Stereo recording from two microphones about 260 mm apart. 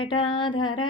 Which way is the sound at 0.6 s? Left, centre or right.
Left.